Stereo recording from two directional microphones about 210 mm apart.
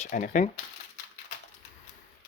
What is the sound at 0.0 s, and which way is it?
Speech, 35° left (ahead or behind).